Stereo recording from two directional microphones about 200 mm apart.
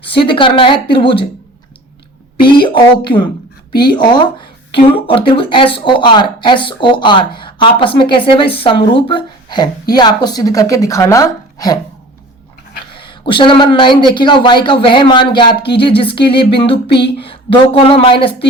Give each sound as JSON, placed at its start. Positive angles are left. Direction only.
{"t": 0.2, "sound": "speech", "side_deg": 25}
{"t": 2.6, "sound": "speech", "side_deg": 25}
{"t": 13.0, "sound": "speech", "side_deg": 25}
{"t": 16.7, "sound": "speech", "side_deg": 55}
{"t": 17.2, "sound": "speech", "side_deg": 25}